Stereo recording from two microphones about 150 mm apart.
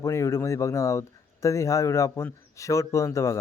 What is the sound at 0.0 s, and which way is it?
Speech, 20° left (ahead or behind).